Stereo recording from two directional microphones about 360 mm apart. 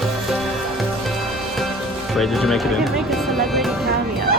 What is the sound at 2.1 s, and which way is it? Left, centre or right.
Speech, centre.